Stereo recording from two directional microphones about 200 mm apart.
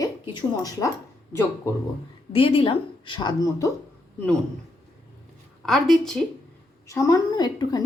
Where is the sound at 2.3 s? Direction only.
25° left (ahead or behind).